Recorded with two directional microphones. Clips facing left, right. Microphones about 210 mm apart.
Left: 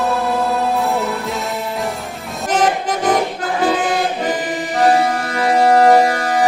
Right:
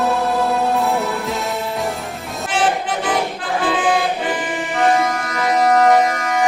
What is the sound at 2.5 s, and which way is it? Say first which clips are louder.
Music: left 3 dB; 40° left (ahead or behind).